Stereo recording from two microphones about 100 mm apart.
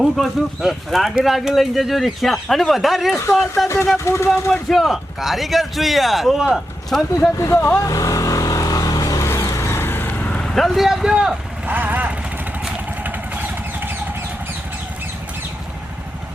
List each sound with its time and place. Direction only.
0.0 s speech: centre (ahead or behind)
3.9 s speech: 25° left (ahead or behind)
4.5 s speech: centre (ahead or behind)
7.3 s speech: 30° left (ahead or behind)
7.9 s vehicle: 35° left (ahead or behind); by 10.5 s 15° left (ahead or behind)
10.5 s speech: centre (ahead or behind); by 12.1 s 15° right (ahead or behind)
12.6 s vehicle: 15° right (ahead or behind)